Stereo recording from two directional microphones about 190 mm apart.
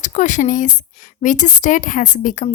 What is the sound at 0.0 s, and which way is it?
A woman's voice, 40° left (ahead or behind).